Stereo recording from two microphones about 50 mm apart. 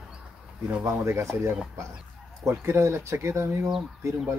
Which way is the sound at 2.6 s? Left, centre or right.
Right.